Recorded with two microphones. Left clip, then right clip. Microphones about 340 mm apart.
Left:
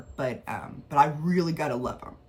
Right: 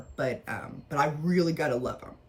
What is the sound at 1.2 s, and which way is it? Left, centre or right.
Speech, centre.